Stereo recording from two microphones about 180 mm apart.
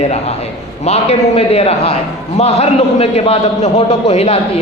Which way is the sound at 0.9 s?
35° left (ahead or behind).